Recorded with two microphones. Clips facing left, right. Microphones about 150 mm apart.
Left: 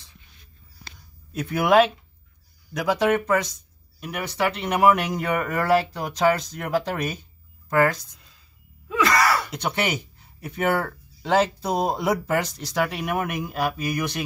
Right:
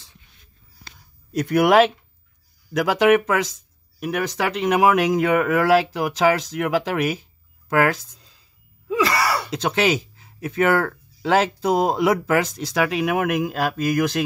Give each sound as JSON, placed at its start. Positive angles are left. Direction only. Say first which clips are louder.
{"t": 1.3, "sound": "speech", "louder": "right 3 dB", "side_deg": -75}
{"t": 2.7, "sound": "speech", "louder": "right 5 dB", "side_deg": -90}
{"t": 8.8, "sound": "gasp", "louder": "even", "side_deg": -30}
{"t": 9.5, "sound": "speech", "louder": "right 6 dB", "side_deg": -90}